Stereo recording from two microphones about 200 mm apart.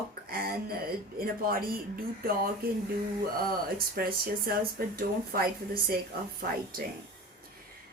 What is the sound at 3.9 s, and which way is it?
Speech, 50° right (ahead or behind).